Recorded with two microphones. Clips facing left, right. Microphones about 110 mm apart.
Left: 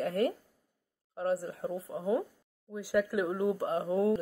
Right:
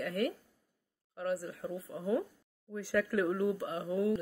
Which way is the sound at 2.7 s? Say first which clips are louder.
Left 2 dB; 15° left (ahead or behind).